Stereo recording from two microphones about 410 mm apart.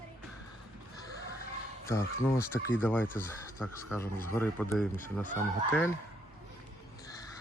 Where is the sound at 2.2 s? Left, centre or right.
Centre.